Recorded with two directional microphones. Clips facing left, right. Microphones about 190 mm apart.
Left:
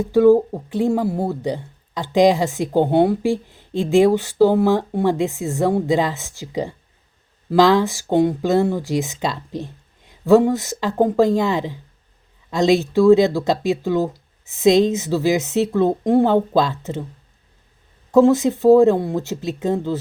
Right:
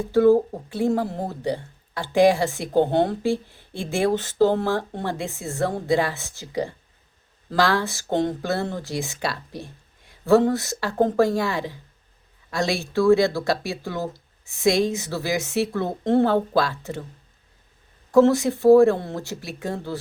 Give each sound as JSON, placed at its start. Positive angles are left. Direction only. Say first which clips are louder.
{"t": 0.0, "sound": "speech", "louder": "left 4 dB", "side_deg": 15}
{"t": 18.1, "sound": "speech", "louder": "left 3 dB", "side_deg": 20}